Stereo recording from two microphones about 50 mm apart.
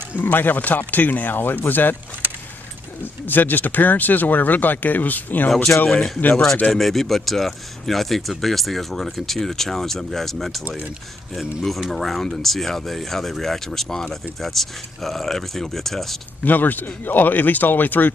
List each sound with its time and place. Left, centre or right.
0.2 s speech: left
3.0 s speech: left
5.9 s speech: centre
16.4 s speech: left